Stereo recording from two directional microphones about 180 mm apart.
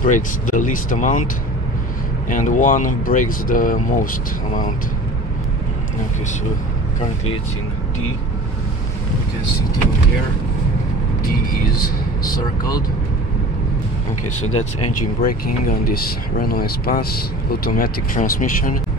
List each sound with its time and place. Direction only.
0.0 s speech: 45° left (ahead or behind)
2.2 s speech: 45° left (ahead or behind)
12.3 s speech: 20° left (ahead or behind)
14.6 s speech: 50° left (ahead or behind)